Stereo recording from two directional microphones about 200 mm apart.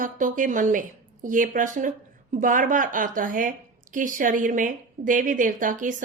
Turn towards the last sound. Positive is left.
turn(degrees=-40)  # may be behind; listen again after turning